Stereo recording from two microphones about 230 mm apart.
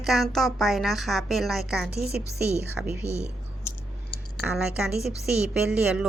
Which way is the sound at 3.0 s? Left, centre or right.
Right.